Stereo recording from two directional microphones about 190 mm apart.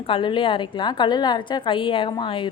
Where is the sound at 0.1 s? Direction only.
25° left (ahead or behind).